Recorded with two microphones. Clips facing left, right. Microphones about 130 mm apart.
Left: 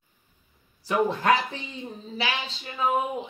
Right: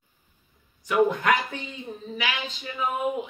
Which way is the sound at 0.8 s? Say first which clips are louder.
Right 1 dB; 30° left (ahead or behind).